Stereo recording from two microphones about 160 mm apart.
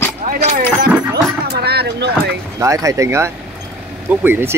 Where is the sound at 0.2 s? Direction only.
55° right (ahead or behind).